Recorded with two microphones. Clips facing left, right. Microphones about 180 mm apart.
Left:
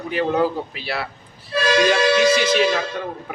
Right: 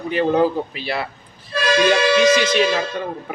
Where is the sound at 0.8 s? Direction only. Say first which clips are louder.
Right 2 dB; 5° left (ahead or behind).